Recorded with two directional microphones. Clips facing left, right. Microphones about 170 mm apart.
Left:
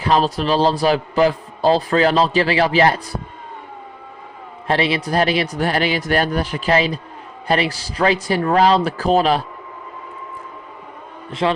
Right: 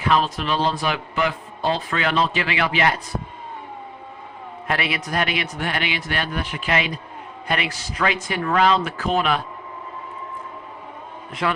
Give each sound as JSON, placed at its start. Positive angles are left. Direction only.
{"t": 0.0, "sound": "a man's voice", "side_deg": 35}
{"t": 4.7, "sound": "a man's voice", "side_deg": 30}
{"t": 11.3, "sound": "a man's voice", "side_deg": 25}